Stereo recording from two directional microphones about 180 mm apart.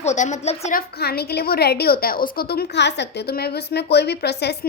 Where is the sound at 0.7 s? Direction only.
60° left (ahead or behind).